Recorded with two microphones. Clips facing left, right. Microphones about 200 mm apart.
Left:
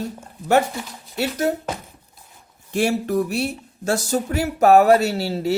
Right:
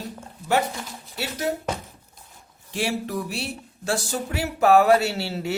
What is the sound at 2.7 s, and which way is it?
A woman's voice, 50° left (ahead or behind).